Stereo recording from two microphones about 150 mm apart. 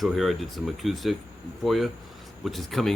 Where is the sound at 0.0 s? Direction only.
Centre (ahead or behind).